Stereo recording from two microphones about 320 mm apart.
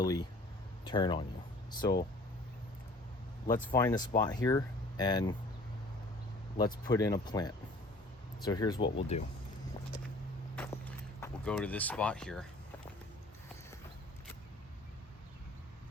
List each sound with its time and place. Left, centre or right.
0.0 s speech: centre
3.4 s speech: left
3.8 s speech: centre
6.6 s speech: centre
10.5 s walk: centre
11.2 s speech: centre